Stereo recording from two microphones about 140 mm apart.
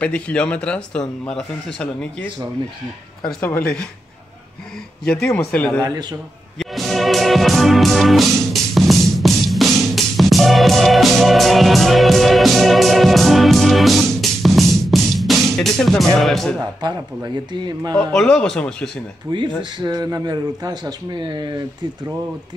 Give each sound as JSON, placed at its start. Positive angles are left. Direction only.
{"t": 0.0, "sound": "a man's voice", "side_deg": 10}
{"t": 3.3, "sound": "a man's voice", "side_deg": 15}
{"t": 5.2, "sound": "a man's voice", "side_deg": 15}
{"t": 5.8, "sound": "a man's voice", "side_deg": -30}
{"t": 6.6, "sound": "music", "side_deg": 0}
{"t": 16.2, "sound": "speech", "side_deg": 0}
{"t": 16.8, "sound": "speech", "side_deg": -30}
{"t": 17.9, "sound": "speech", "side_deg": 5}
{"t": 19.3, "sound": "speech", "side_deg": -35}